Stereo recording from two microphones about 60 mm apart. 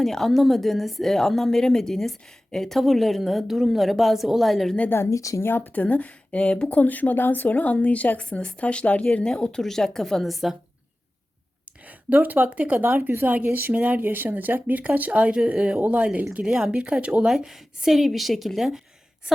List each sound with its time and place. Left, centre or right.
0.0 s a woman's voice: centre
4.9 s speech: left
5.1 s speech: left
5.4 s speech: left; by 10.6 s centre
11.9 s a woman's voice: right
17.3 s a woman's voice: centre